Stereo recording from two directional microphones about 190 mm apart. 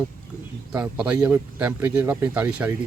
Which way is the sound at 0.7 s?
5° right (ahead or behind).